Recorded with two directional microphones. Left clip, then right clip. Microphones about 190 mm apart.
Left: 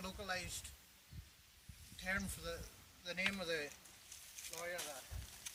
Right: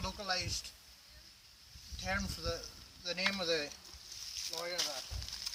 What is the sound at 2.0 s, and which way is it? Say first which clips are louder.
Speech: right 5 dB; 5° left (ahead or behind).